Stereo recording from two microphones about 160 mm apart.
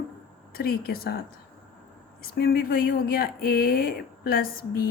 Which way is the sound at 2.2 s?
75° left (ahead or behind).